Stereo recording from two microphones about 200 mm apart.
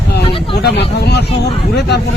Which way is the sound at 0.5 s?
55° left (ahead or behind).